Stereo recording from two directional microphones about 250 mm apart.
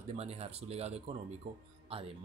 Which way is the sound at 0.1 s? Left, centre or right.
Right.